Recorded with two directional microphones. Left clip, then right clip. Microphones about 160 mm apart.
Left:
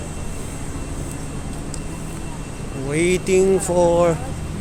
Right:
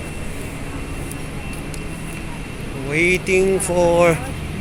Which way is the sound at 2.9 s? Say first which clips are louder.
Right 1 dB; 20° left (ahead or behind).